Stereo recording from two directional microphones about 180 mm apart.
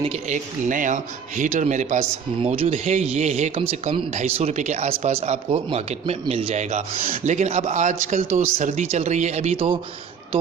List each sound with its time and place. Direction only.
0.0 s speech: 40° right (ahead or behind)